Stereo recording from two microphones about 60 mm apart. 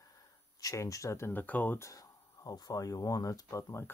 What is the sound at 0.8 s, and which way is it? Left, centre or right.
Speech, left.